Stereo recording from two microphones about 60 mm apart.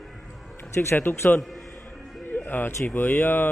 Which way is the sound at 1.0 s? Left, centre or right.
Left.